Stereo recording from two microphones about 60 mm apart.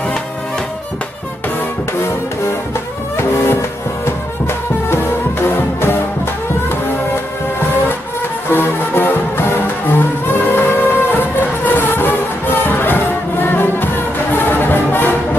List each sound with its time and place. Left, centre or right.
3.2 s music: left
8.5 s music: left